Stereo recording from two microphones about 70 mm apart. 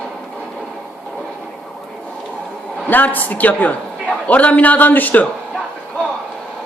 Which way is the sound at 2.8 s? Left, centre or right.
Left.